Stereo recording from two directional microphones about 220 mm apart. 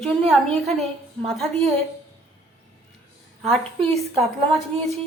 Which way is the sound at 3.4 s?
Centre (ahead or behind).